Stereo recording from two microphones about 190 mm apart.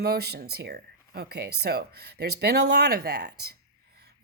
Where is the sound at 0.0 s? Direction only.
55° right (ahead or behind).